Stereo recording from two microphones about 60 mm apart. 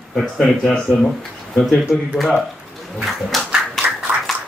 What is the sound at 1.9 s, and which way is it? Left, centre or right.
Speech, centre.